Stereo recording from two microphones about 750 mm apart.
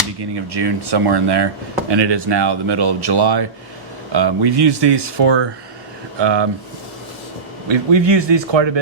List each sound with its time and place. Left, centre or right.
0.5 s speech: right
7.7 s speech: right